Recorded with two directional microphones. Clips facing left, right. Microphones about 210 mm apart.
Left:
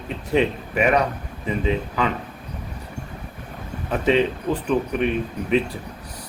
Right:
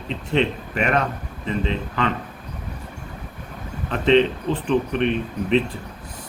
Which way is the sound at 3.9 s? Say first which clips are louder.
Right 2 dB; 10° left (ahead or behind).